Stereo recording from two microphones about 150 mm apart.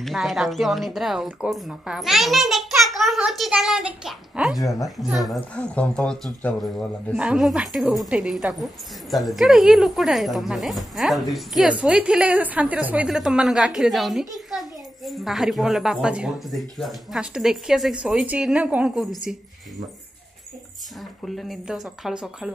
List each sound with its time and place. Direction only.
0.0 s speech: centre (ahead or behind)
4.6 s a woman's voice: 20° left (ahead or behind)
4.8 s speech: centre (ahead or behind)
21.2 s speech: centre (ahead or behind)